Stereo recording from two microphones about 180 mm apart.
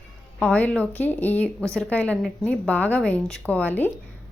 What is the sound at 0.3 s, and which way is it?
A woman's voice, 10° left (ahead or behind).